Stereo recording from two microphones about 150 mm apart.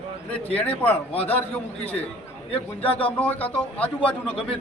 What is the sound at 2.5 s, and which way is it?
Speech, 40° left (ahead or behind).